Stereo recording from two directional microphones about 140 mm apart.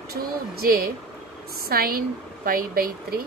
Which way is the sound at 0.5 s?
90° right.